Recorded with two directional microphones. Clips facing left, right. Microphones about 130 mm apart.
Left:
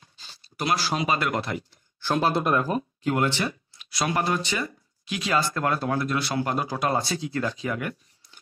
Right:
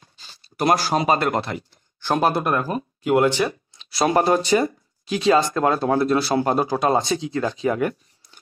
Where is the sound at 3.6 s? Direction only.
30° right (ahead or behind).